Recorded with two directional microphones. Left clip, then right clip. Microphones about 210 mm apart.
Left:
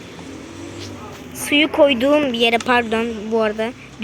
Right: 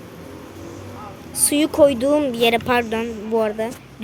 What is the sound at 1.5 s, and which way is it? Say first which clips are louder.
Speech: left 2 dB; 15° right (ahead or behind).